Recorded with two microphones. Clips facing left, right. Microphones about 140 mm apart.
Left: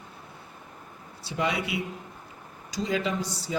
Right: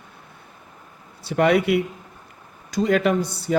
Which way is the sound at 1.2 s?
60° right (ahead or behind).